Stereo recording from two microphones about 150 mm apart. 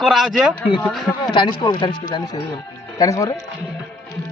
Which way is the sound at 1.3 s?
30° left (ahead or behind).